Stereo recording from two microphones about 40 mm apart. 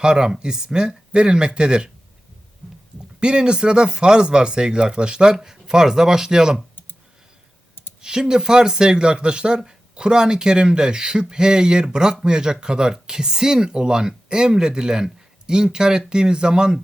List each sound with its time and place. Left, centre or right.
0.0 s speech: centre
3.2 s speech: right
8.0 s speech: centre